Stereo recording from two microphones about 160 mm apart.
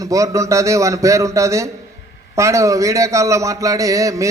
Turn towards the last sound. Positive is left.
turn(degrees=-20)  # may be behind; listen again after turning